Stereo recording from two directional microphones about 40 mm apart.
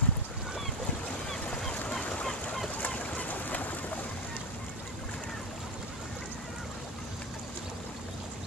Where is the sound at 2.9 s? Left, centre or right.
Left.